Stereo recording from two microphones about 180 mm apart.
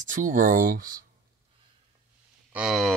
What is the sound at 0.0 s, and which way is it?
Speech, 45° right (ahead or behind).